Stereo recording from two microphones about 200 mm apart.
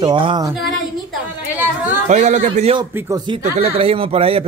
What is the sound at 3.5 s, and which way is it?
Speech, 30° right (ahead or behind).